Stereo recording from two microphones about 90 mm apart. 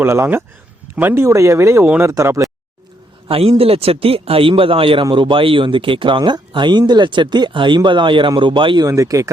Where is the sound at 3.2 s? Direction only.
90° right.